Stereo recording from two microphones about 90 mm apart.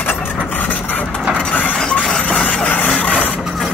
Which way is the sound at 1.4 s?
15° left (ahead or behind).